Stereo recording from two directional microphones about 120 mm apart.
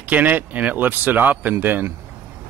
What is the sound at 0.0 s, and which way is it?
Speech, 15° right (ahead or behind).